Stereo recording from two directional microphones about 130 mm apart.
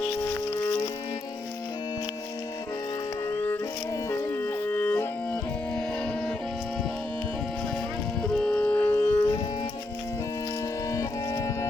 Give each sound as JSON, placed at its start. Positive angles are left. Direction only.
{"t": 3.2, "sound": "music", "side_deg": 15}
{"t": 8.2, "sound": "a sound", "side_deg": 5}
{"t": 10.9, "sound": "music", "side_deg": 25}